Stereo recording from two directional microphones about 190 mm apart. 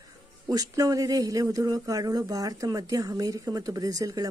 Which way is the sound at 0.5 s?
20° right (ahead or behind).